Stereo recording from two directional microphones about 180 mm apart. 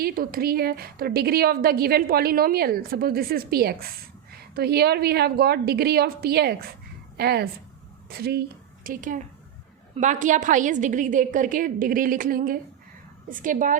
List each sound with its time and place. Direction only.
0.0 s a woman's voice: 55° right (ahead or behind)